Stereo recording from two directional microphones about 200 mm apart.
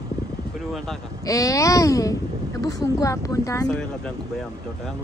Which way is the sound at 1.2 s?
15° left (ahead or behind).